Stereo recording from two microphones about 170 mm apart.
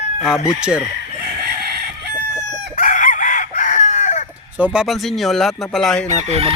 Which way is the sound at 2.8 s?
50° left (ahead or behind).